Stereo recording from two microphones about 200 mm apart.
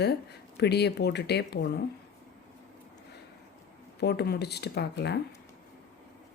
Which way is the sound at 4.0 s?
55° left (ahead or behind).